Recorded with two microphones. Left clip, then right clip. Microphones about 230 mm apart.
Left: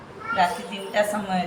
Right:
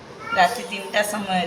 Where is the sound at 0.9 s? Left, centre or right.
Right.